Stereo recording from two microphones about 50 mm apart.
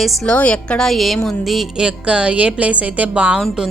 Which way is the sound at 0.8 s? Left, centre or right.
Centre.